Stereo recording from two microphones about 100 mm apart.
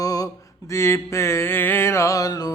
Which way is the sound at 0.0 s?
35° left (ahead or behind).